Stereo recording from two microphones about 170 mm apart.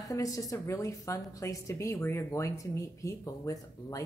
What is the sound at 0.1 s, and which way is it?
A woman's voice, 20° left (ahead or behind).